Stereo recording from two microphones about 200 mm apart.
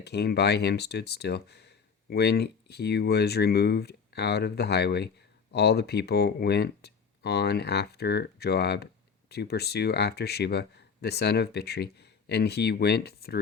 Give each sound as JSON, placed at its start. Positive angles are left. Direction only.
{"t": 0.0, "sound": "speech", "side_deg": 55}